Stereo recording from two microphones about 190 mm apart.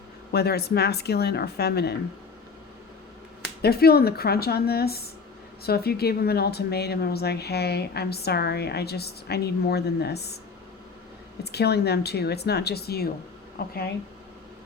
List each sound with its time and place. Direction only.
0.3 s speech: 60° left (ahead or behind)
3.6 s speech: 55° left (ahead or behind)
11.4 s speech: 60° left (ahead or behind)